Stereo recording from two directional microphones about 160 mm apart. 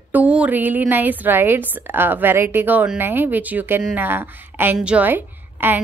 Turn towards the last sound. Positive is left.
turn(degrees=-10)  # may be behind; listen again after turning